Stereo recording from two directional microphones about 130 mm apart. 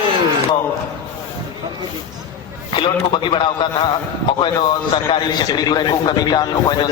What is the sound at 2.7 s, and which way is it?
Speech, 40° left (ahead or behind).